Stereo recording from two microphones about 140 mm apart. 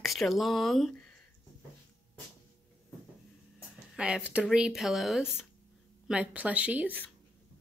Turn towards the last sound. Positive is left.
turn(degrees=-10)  # may be behind; listen again after turning